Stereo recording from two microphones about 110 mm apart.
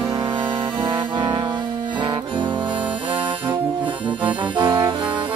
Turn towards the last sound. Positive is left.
turn(degrees=-45)  # may be behind; listen again after turning